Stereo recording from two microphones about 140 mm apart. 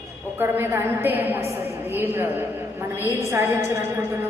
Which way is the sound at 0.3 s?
15° right (ahead or behind).